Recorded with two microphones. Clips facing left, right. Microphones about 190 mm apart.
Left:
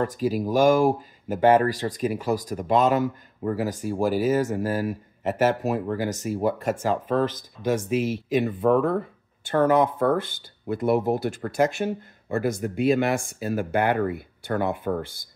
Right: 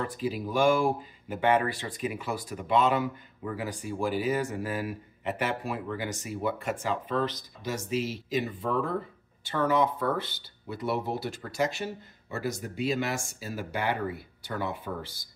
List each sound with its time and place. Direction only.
0.0 s speech: 45° left (ahead or behind)